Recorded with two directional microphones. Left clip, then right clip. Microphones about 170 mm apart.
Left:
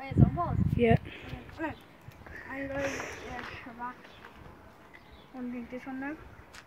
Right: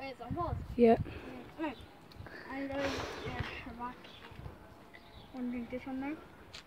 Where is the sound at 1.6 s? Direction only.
5° right (ahead or behind).